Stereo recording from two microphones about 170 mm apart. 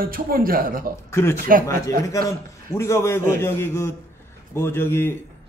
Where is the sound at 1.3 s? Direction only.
55° right (ahead or behind).